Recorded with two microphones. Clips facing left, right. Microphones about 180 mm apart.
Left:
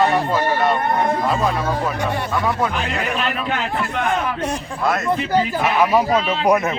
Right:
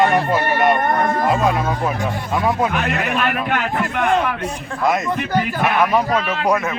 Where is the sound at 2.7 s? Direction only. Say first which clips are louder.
Right 2 dB; 60° right (ahead or behind).